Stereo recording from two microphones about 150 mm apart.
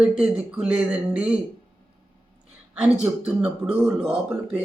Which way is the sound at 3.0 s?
5° right (ahead or behind).